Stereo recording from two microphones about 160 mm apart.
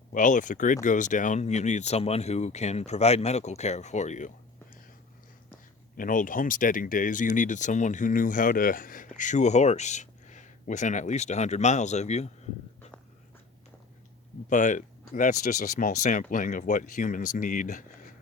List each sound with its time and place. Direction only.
0.1 s speech: 55° left (ahead or behind)
6.0 s speech: 55° left (ahead or behind)
14.5 s speech: 50° left (ahead or behind)